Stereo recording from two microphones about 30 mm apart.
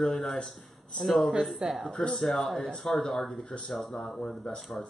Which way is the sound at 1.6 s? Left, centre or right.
Centre.